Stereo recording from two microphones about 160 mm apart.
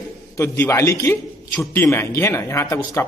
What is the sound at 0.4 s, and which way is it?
Speech, 15° left (ahead or behind).